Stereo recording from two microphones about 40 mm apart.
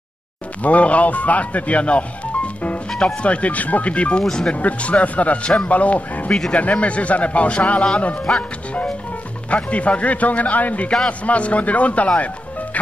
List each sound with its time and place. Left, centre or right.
0.6 s speech: left
2.9 s music: centre
3.2 s speech: left
4.2 s speech: centre
4.6 s speech: left; by 8.4 s centre
9.7 s speech: left
12.7 s music: left